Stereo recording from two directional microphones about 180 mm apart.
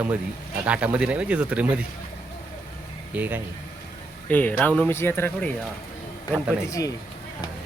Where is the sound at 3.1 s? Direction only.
10° right (ahead or behind).